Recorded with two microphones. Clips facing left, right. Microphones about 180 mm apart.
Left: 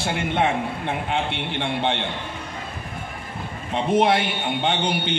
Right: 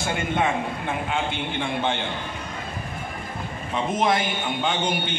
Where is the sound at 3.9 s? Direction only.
65° left (ahead or behind).